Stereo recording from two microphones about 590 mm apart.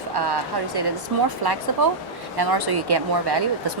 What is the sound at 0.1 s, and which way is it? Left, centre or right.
Speech, right.